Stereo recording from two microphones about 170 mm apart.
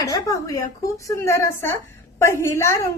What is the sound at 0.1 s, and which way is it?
A woman's voice, 20° left (ahead or behind).